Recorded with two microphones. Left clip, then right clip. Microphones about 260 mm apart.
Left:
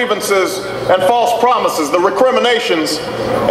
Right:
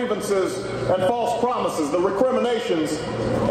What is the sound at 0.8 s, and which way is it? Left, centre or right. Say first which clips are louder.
A man's voice: left 10 dB; left.